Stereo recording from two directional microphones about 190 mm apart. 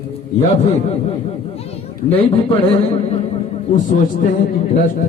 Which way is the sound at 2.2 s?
30° left (ahead or behind).